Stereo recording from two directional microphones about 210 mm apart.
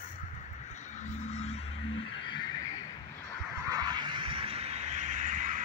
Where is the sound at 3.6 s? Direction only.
20° right (ahead or behind); by 5.6 s 40° right (ahead or behind).